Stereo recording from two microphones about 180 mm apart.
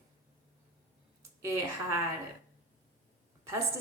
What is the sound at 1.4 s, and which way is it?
Speech, 15° right (ahead or behind).